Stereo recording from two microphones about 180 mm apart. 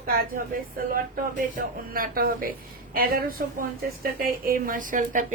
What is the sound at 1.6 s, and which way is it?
A woman's voice, 55° right (ahead or behind).